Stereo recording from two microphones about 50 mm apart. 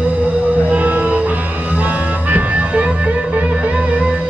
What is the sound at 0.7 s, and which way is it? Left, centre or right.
Music, right.